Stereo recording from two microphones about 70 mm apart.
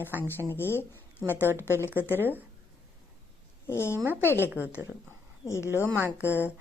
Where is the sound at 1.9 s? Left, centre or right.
Right.